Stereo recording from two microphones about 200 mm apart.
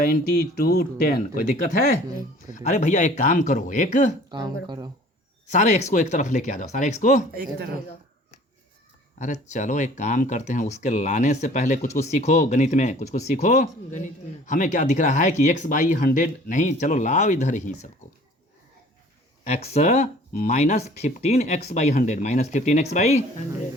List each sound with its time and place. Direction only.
0.0 s speech: 45° left (ahead or behind)
4.3 s speech: 20° right (ahead or behind)
5.5 s speech: 35° left (ahead or behind)
9.1 s speech: 40° left (ahead or behind)
19.5 s speech: 35° left (ahead or behind)